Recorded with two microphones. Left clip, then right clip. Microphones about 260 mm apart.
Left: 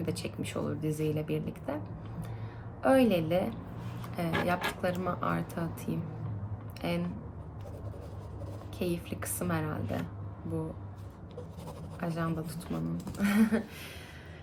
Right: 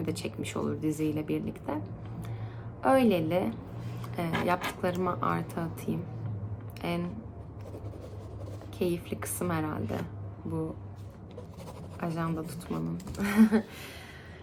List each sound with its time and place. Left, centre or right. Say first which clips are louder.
0.0 s a woman's voice: right 2 dB; centre
2.8 s a woman's voice: right 1 dB; centre
8.8 s a woman's voice: right 4 dB; centre
11.9 s a woman's voice: right 1 dB; centre
12.7 s speech: right 1 dB; centre
13.1 s a woman's voice: right 3 dB; centre